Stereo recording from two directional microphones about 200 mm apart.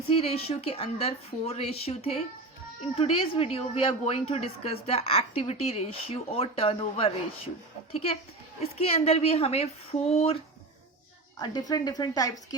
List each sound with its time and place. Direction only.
0.1 s a woman's voice: 30° left (ahead or behind)
11.3 s a woman's voice: 20° left (ahead or behind)